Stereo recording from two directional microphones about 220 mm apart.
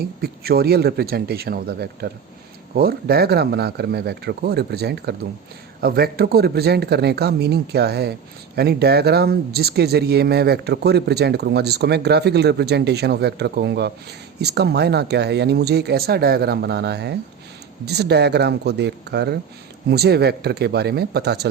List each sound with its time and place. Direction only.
0.0 s speech: 45° right (ahead or behind)